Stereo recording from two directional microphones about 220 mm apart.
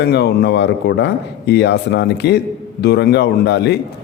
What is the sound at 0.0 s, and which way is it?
A man's voice, 50° left (ahead or behind).